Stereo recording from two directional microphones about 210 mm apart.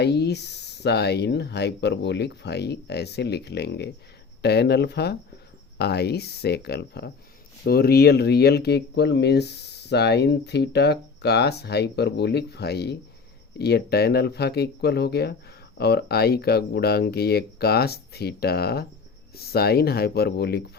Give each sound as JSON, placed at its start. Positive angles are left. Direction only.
{"t": 0.0, "sound": "speech", "side_deg": 55}